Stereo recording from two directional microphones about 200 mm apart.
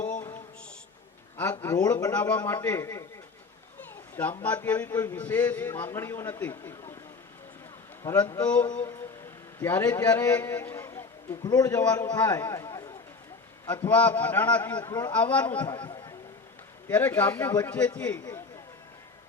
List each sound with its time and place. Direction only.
0.0 s a sound: 40° left (ahead or behind)
1.6 s a man's voice: 15° left (ahead or behind)
3.8 s children playing: 10° left (ahead or behind)
4.4 s a man's voice: 10° left (ahead or behind)
8.0 s a man's voice: 5° left (ahead or behind)
14.8 s speech: 20° left (ahead or behind)
15.1 s a man's voice: 5° left (ahead or behind)
15.6 s a man's voice: 20° left (ahead or behind)
16.9 s a man's voice: 10° left (ahead or behind)